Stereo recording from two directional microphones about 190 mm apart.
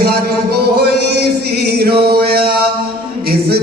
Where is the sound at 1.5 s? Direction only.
55° right (ahead or behind).